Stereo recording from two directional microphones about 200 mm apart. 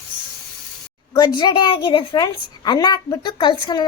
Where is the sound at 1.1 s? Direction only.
20° left (ahead or behind).